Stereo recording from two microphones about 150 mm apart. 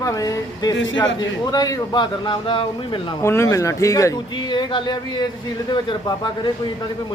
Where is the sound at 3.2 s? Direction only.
20° left (ahead or behind).